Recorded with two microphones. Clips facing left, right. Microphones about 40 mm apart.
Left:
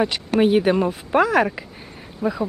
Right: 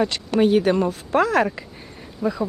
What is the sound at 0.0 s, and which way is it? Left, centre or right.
Speech, centre.